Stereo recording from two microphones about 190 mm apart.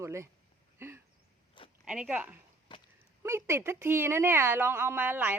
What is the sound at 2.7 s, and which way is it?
Chop, 25° left (ahead or behind).